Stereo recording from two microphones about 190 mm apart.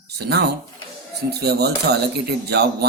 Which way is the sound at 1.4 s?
60° right (ahead or behind).